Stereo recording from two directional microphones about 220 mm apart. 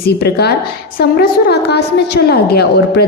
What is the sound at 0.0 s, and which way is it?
A woman's voice, 45° left (ahead or behind).